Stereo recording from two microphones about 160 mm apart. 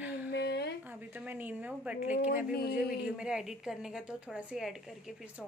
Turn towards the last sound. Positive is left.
turn(degrees=-5)  # may be behind; listen again after turning